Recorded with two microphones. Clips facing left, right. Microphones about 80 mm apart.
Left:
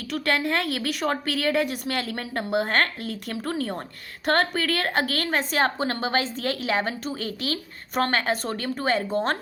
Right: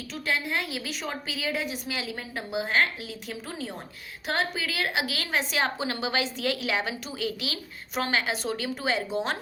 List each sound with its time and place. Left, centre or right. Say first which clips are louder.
0.1 s a woman's voice: left 5 dB; left